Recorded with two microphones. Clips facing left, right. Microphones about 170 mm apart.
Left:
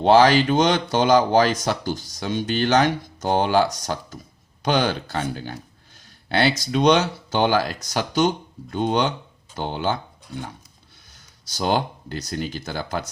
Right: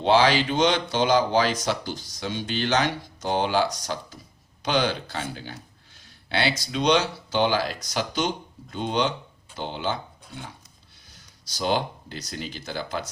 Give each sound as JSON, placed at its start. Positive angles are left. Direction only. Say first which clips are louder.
{"t": 0.0, "sound": "speech", "louder": "left 5 dB", "side_deg": 45}
{"t": 11.4, "sound": "speech", "louder": "left 3 dB", "side_deg": 50}